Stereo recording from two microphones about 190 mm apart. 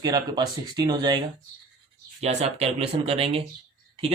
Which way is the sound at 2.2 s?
35° right (ahead or behind).